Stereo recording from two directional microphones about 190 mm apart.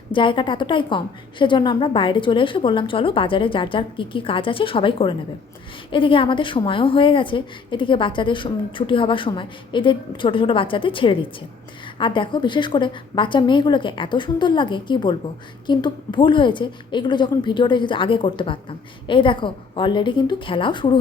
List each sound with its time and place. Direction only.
0.1 s a woman's voice: 25° left (ahead or behind)